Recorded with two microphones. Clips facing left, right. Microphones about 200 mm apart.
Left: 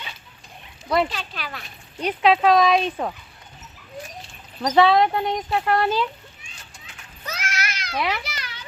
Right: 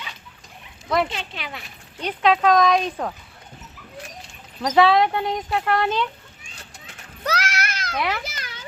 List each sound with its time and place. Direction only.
1.1 s speech: 25° right (ahead or behind)
2.0 s speech: 10° left (ahead or behind)
4.6 s speech: centre (ahead or behind)
7.3 s a sound: 75° right (ahead or behind); by 7.9 s 50° right (ahead or behind)
7.9 s speech: centre (ahead or behind)
8.2 s children playing: 45° right (ahead or behind)